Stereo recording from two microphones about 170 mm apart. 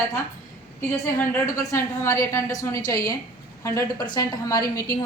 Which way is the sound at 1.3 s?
15° left (ahead or behind).